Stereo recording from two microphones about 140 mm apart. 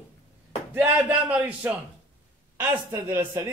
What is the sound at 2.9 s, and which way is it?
Speech, 15° right (ahead or behind).